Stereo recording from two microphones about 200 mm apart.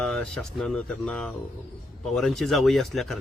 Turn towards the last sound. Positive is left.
turn(degrees=0)  # may be behind; listen again after turning